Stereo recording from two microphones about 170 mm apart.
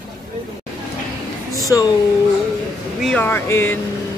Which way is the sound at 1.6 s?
20° left (ahead or behind).